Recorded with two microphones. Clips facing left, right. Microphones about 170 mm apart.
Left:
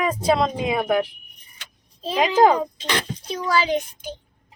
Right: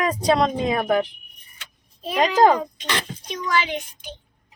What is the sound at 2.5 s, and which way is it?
A child's voice, 30° left (ahead or behind).